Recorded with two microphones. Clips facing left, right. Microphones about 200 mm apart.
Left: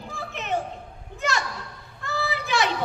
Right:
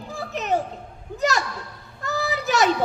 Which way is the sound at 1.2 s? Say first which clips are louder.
Right 4 dB; 40° right (ahead or behind).